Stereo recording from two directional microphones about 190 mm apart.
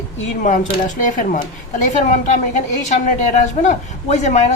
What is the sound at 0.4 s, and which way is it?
Speech, 40° left (ahead or behind).